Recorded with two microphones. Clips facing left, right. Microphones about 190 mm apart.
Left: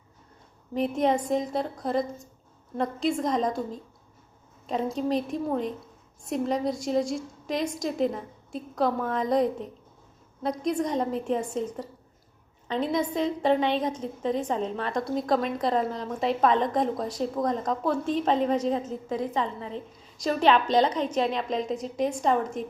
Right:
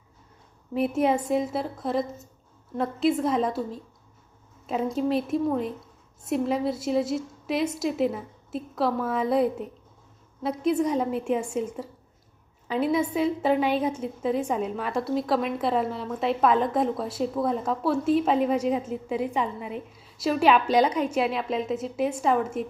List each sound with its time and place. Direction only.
0.7 s a woman's voice: 5° right (ahead or behind)